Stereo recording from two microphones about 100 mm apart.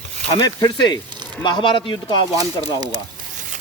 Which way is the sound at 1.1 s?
45° right (ahead or behind).